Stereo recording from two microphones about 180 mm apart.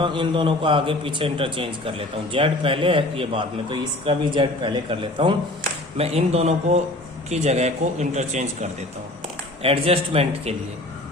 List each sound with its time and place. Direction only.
0.0 s a man's voice: 25° right (ahead or behind)